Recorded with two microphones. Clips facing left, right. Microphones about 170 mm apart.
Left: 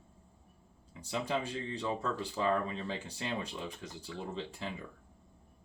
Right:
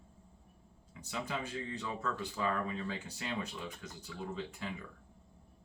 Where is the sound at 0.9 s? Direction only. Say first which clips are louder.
Left 5 dB; 30° left (ahead or behind).